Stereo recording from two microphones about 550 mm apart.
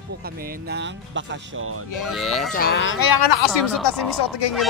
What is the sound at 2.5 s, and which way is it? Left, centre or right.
Speech, centre.